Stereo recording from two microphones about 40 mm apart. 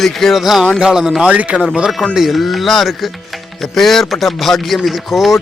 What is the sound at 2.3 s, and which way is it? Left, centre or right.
Music, centre.